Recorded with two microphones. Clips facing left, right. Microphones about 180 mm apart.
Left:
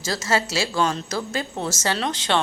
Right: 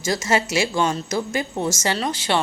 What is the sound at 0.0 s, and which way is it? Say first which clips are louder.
A woman's voice: right 2 dB; 15° right (ahead or behind).